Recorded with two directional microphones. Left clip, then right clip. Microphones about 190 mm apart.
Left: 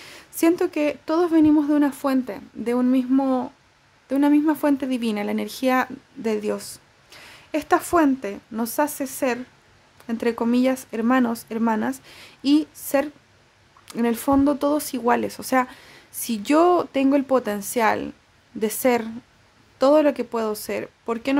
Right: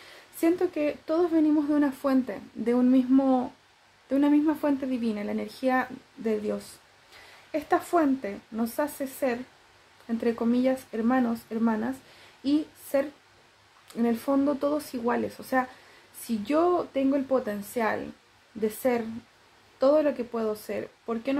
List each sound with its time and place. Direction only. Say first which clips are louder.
0.4 s speech: left 5 dB; 40° left (ahead or behind)